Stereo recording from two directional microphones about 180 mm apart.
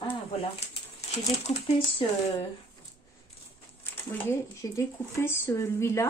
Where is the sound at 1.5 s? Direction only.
35° left (ahead or behind).